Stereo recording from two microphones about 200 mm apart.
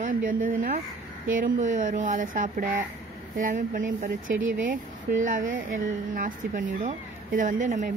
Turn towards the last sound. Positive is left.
turn(degrees=-40)  # may be behind; listen again after turning